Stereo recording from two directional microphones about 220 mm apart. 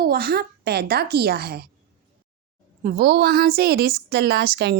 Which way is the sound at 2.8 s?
45° right (ahead or behind).